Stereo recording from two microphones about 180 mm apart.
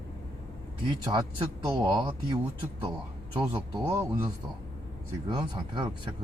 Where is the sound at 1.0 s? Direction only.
25° right (ahead or behind).